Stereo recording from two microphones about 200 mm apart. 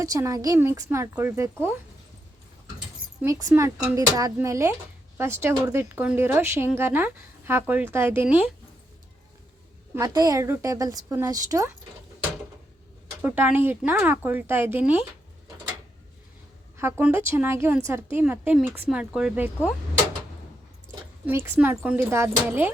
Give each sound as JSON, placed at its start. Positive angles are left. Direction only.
{"t": 0.0, "sound": "a woman's voice", "side_deg": -15}
{"t": 3.2, "sound": "a woman's voice", "side_deg": -15}
{"t": 9.9, "sound": "a woman's voice", "side_deg": -20}
{"t": 13.2, "sound": "a woman's voice", "side_deg": -10}
{"t": 17.0, "sound": "a woman's voice", "side_deg": -10}
{"t": 21.2, "sound": "a woman's voice", "side_deg": -10}